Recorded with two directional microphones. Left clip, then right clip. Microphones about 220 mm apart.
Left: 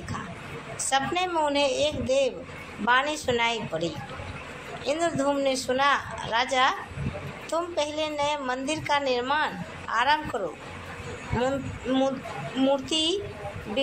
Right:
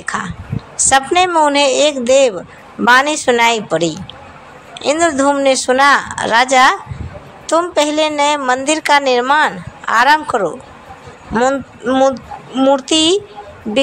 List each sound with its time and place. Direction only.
0.1 s a woman's voice: 40° right (ahead or behind)